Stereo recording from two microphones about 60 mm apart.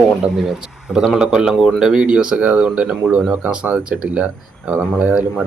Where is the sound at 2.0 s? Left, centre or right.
Centre.